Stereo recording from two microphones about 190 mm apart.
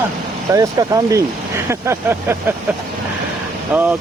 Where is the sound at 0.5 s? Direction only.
15° right (ahead or behind).